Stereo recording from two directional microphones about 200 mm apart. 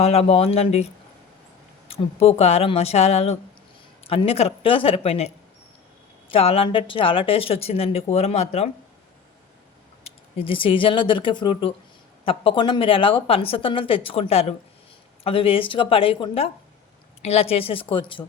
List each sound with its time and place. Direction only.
0.0 s speech: 30° left (ahead or behind)
1.9 s speech: 30° left (ahead or behind)
10.0 s speech: 25° left (ahead or behind)